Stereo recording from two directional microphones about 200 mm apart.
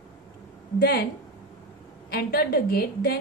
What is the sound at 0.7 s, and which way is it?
Speech, 50° left (ahead or behind).